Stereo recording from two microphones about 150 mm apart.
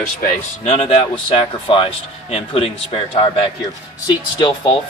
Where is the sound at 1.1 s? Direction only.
35° left (ahead or behind).